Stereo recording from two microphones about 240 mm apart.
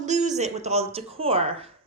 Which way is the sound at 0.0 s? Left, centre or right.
Right.